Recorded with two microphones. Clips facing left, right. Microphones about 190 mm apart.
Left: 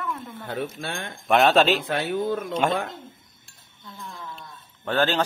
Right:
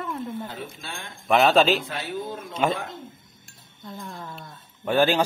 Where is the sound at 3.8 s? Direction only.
40° right (ahead or behind).